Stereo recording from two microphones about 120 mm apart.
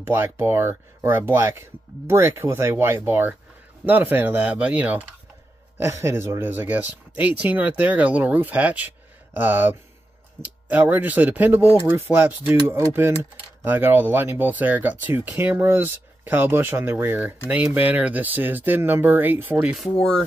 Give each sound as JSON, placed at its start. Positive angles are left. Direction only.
{"t": 0.0, "sound": "speech", "side_deg": -20}
{"t": 19.7, "sound": "speech", "side_deg": 0}